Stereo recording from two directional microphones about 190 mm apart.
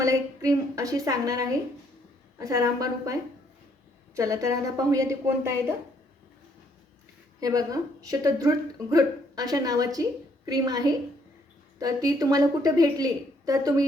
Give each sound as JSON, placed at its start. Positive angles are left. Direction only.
{"t": 0.0, "sound": "a woman's voice", "side_deg": -15}
{"t": 7.3, "sound": "a woman's voice", "side_deg": -20}